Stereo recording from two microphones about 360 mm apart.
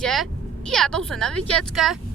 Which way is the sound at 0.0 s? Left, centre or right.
Centre.